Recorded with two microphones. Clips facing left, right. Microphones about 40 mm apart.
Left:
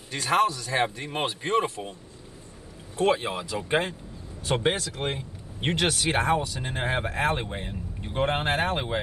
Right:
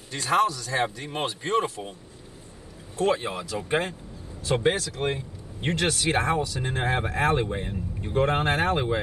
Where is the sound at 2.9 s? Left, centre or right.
Left; by 3.9 s centre.